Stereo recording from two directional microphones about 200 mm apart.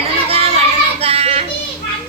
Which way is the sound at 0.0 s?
30° right (ahead or behind).